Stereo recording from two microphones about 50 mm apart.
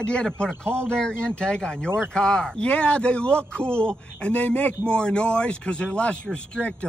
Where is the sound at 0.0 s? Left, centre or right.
Centre.